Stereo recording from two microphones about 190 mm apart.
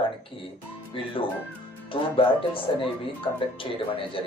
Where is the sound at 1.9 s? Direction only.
30° left (ahead or behind).